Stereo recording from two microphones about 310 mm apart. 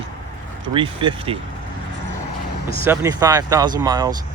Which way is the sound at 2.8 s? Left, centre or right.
Centre.